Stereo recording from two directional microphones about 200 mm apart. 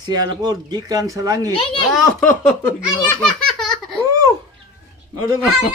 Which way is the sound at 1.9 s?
Centre (ahead or behind).